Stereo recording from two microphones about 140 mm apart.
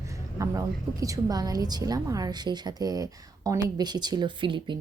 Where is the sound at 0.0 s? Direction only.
20° right (ahead or behind).